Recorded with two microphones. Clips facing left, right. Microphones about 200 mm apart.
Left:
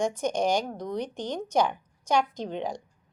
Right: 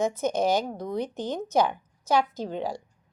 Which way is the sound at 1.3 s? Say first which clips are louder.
Right 1 dB; 5° right (ahead or behind).